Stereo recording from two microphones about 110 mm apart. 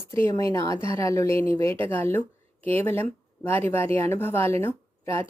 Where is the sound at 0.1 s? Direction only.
25° left (ahead or behind).